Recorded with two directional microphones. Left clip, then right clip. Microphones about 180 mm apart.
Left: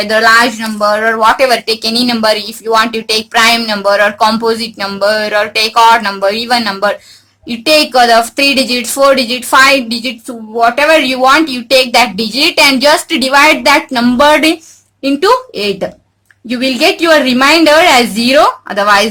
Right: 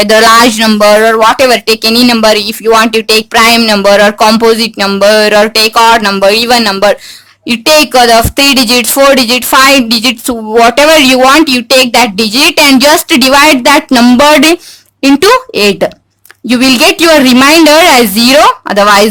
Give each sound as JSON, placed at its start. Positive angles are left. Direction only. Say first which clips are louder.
{"t": 0.0, "sound": "speech", "louder": "right 4 dB", "side_deg": -35}